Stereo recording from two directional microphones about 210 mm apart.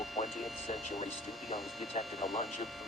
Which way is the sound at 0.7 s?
30° left (ahead or behind).